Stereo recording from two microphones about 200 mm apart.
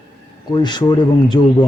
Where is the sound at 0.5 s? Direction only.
20° left (ahead or behind).